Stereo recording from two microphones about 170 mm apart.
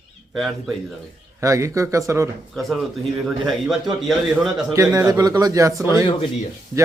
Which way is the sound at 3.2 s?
Centre (ahead or behind).